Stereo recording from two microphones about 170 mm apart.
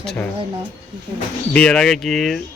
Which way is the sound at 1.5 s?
5° left (ahead or behind).